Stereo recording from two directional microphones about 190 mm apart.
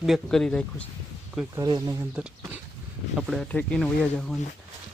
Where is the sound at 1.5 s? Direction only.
20° right (ahead or behind).